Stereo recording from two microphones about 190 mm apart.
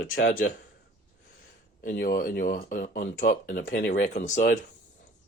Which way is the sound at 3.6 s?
60° left (ahead or behind).